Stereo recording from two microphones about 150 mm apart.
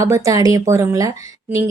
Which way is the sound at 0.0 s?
20° right (ahead or behind).